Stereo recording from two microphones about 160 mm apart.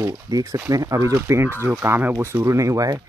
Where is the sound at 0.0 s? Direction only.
20° right (ahead or behind).